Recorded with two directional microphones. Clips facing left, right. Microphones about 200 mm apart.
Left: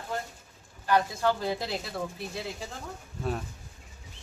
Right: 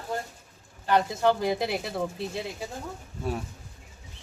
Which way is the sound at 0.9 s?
20° right (ahead or behind).